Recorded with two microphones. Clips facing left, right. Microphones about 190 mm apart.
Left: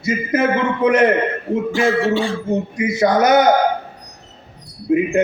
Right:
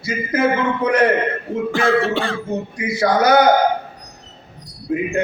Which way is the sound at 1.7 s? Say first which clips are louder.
Even; 60° right (ahead or behind).